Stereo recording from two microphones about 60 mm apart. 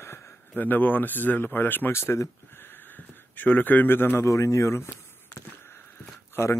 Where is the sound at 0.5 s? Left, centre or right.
Left.